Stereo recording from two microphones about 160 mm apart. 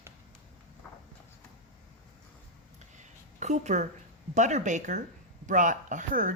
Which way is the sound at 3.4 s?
45° right (ahead or behind).